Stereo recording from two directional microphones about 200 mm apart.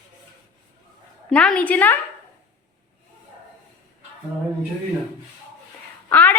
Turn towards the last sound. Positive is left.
turn(degrees=10)  # may be behind; listen again after turning